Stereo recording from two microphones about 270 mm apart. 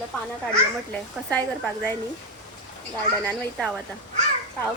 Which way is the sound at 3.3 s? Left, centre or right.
Centre.